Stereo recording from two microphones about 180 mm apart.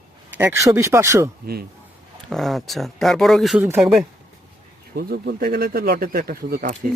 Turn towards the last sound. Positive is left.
turn(degrees=-50)  # may be behind; listen again after turning